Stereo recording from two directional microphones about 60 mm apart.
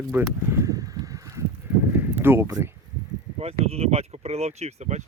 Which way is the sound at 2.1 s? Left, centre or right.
Right.